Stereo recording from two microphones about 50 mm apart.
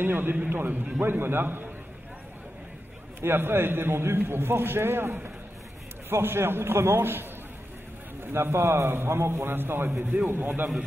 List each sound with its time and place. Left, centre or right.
0.0 s a man's voice: right
1.0 s a man's voice: right
3.2 s a man's voice: right